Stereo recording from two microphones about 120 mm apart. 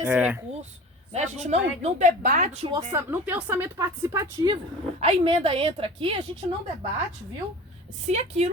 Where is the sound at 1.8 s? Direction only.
85° right.